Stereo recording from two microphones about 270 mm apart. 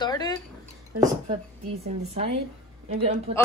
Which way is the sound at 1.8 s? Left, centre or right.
Right.